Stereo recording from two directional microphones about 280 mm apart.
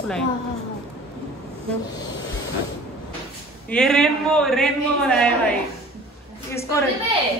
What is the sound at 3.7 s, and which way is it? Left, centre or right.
A man's voice, centre.